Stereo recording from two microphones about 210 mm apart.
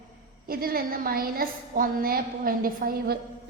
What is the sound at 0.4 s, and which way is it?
A woman's voice, 45° right (ahead or behind).